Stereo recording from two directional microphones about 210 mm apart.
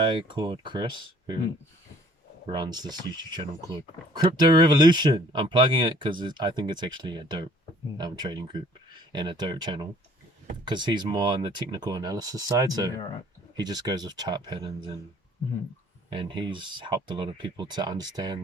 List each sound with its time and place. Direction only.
0.0 s speech: 20° right (ahead or behind)
2.5 s speech: 20° right (ahead or behind)
16.0 s speech: 20° right (ahead or behind)